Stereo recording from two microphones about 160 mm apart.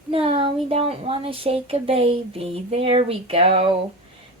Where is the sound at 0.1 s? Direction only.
35° right (ahead or behind).